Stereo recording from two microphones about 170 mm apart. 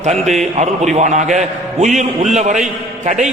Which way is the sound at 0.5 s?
45° right (ahead or behind).